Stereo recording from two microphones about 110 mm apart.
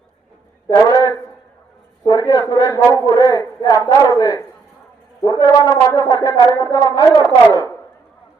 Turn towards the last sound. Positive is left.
turn(degrees=30)  # may be behind; listen again after turning